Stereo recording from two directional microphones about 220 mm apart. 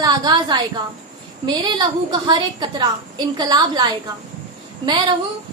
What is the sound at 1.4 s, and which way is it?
A woman's voice, 20° right (ahead or behind).